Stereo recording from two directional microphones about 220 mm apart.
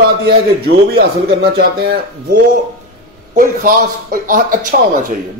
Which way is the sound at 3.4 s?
40° right (ahead or behind).